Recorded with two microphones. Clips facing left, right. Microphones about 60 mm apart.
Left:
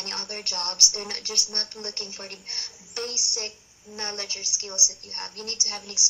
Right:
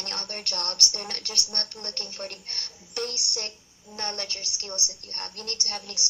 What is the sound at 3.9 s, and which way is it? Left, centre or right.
A woman's voice, centre.